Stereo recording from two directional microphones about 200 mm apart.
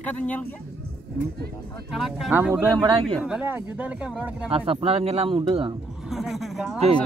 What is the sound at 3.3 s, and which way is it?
Speech, 10° right (ahead or behind).